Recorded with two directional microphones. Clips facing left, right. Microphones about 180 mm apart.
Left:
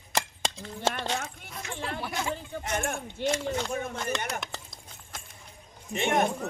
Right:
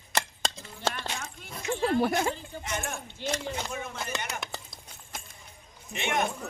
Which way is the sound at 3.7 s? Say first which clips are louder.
Left 4 dB; 45° left (ahead or behind).